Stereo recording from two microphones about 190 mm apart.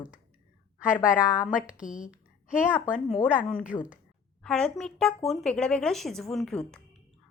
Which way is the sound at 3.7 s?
15° left (ahead or behind).